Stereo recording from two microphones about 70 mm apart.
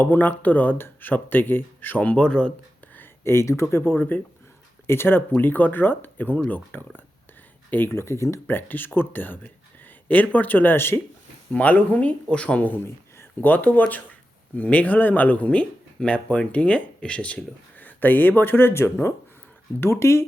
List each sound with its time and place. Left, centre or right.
0.0 s speech: left
2.9 s a sound: left
3.6 s speech: left
11.5 s speech: left